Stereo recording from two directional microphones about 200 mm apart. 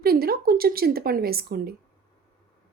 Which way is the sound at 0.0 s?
50° right (ahead or behind).